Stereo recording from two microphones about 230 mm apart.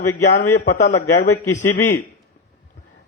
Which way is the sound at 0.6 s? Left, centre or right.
Left.